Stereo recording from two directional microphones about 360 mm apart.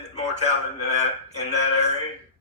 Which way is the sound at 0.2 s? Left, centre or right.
Centre.